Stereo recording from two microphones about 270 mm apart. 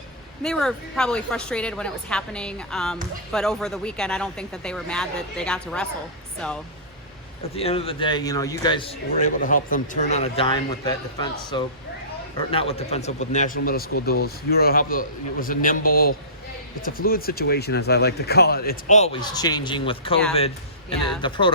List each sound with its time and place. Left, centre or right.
0.4 s speech: centre
7.5 s a man's voice: left
21.2 s speech: centre